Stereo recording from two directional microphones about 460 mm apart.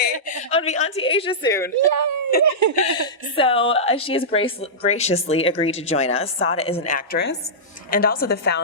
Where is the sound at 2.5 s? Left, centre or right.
Right.